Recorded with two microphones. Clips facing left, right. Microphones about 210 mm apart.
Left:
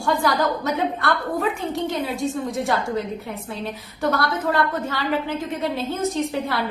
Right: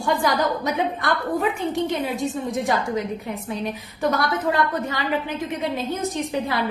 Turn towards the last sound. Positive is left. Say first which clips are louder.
# left 1 dB
turn(degrees=-15)  # may be behind; listen again after turning